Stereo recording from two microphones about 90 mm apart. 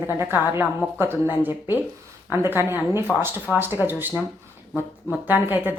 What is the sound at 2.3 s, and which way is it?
Speech, 25° right (ahead or behind).